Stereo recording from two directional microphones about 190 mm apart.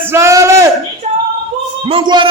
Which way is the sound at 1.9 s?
25° right (ahead or behind).